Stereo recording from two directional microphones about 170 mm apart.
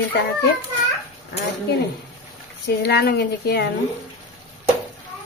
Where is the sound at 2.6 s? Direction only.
75° left (ahead or behind).